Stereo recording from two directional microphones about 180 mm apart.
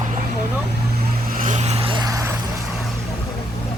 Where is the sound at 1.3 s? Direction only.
45° right (ahead or behind); by 2.2 s 20° right (ahead or behind).